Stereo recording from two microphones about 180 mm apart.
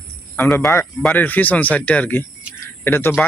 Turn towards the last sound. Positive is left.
turn(degrees=10)  # may be behind; listen again after turning